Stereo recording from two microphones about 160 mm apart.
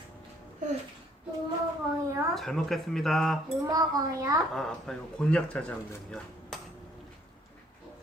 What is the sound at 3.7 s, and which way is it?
Speech, 20° right (ahead or behind).